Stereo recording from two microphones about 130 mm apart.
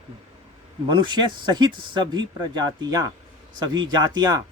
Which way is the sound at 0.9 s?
35° right (ahead or behind).